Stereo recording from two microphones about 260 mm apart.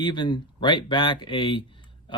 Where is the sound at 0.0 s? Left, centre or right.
Centre.